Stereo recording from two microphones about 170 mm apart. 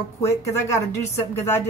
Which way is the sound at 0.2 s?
15° left (ahead or behind).